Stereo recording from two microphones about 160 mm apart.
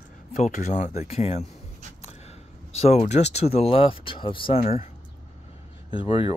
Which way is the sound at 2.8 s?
45° left (ahead or behind).